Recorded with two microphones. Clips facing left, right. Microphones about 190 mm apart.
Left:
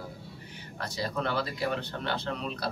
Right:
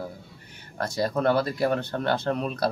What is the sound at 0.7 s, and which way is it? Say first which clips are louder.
Speech: right 7 dB; 50° right (ahead or behind).